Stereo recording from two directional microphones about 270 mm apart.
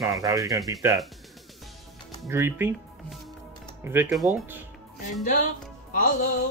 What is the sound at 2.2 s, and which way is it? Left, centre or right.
Speech, centre.